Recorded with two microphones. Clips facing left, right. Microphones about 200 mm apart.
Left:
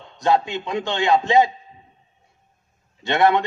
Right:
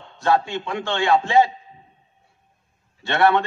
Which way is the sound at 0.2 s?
20° left (ahead or behind).